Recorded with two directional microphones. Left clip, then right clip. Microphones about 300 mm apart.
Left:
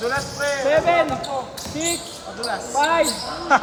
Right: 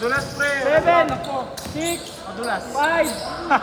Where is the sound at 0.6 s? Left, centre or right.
Left.